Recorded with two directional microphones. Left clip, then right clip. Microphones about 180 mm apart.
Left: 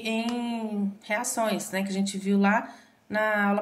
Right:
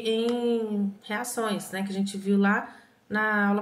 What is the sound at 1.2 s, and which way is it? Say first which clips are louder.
A woman's voice: even; 30° left (ahead or behind).